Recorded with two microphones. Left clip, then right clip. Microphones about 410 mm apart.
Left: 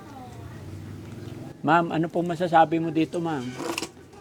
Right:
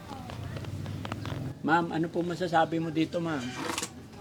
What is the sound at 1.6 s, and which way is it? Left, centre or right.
A man's voice, left.